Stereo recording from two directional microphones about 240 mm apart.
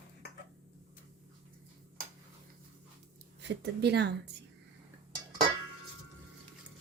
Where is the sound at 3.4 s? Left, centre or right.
Right.